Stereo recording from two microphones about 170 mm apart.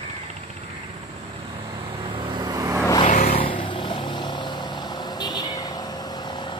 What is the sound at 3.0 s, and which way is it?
Vehicle, 50° left (ahead or behind).